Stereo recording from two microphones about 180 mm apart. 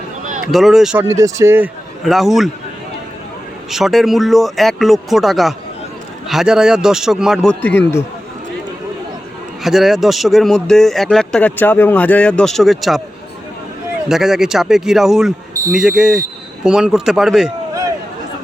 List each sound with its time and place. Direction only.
0.5 s speech: centre (ahead or behind)
1.1 s speech: 15° right (ahead or behind)
2.0 s speech: centre (ahead or behind)
3.7 s speech: centre (ahead or behind)
7.6 s a man's voice: 10° left (ahead or behind)
9.6 s speech: centre (ahead or behind)
14.1 s speech: centre (ahead or behind)